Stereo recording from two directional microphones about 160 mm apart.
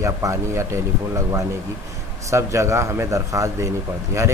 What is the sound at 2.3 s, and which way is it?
A man's voice, 20° right (ahead or behind).